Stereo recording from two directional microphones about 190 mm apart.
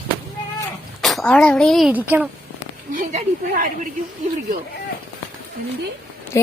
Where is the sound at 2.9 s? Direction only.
40° right (ahead or behind).